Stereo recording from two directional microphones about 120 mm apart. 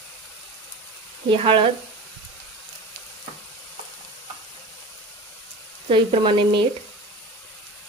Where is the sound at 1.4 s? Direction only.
45° right (ahead or behind).